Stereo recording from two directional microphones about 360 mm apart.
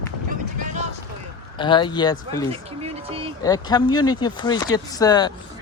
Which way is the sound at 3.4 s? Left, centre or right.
Centre.